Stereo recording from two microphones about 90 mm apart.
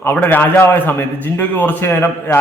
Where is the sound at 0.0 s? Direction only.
20° left (ahead or behind).